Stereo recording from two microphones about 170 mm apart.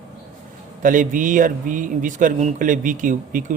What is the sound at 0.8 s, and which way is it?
Speech, 50° right (ahead or behind).